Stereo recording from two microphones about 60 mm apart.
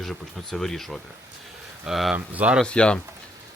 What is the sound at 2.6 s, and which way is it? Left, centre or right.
Speech, centre.